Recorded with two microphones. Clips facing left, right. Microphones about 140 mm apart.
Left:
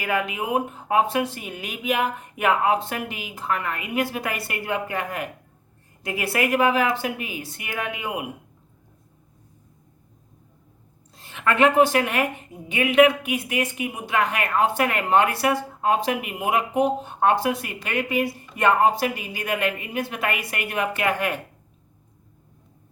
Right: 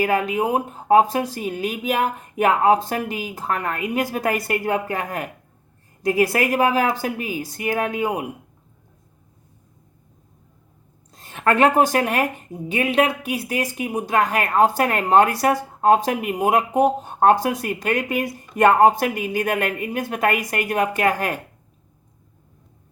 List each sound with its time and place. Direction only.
0.0 s a woman's voice: 35° right (ahead or behind)
11.1 s a woman's voice: 45° right (ahead or behind)